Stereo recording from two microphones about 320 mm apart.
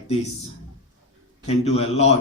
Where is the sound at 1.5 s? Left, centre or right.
Centre.